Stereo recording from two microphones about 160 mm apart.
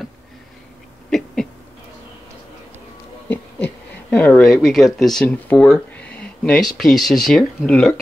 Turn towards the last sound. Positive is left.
turn(degrees=5)  # may be behind; listen again after turning